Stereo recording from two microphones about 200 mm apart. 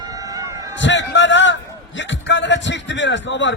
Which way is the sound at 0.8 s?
65° left (ahead or behind).